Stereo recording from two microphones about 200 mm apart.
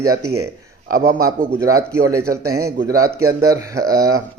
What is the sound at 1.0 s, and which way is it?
Speech, 45° right (ahead or behind).